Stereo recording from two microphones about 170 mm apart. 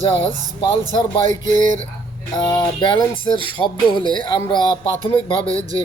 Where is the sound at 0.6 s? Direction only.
30° left (ahead or behind).